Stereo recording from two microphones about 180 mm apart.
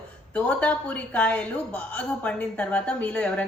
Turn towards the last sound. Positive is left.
turn(degrees=5)  # may be behind; listen again after turning